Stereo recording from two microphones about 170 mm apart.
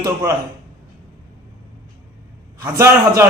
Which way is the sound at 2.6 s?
15° right (ahead or behind).